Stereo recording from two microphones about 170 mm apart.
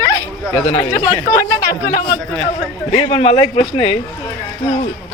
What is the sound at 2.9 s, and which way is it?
A man's voice, 40° left (ahead or behind).